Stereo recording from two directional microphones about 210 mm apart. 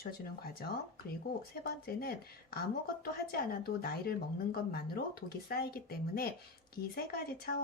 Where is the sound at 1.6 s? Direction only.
45° left (ahead or behind).